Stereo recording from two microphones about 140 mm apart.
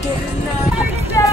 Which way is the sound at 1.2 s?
25° left (ahead or behind).